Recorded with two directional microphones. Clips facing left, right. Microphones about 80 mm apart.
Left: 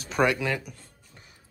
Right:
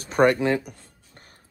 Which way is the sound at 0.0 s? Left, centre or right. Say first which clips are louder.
Right 5 dB; right.